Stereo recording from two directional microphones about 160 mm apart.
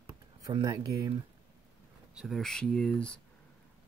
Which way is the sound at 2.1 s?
Centre (ahead or behind).